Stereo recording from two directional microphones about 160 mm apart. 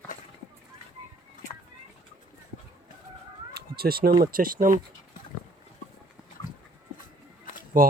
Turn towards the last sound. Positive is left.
turn(degrees=-60)  # may be behind; listen again after turning